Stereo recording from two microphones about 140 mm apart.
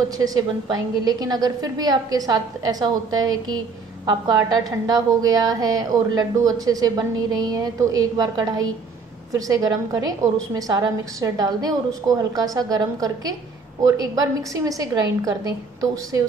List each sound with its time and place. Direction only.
0.2 s a woman's voice: 25° right (ahead or behind)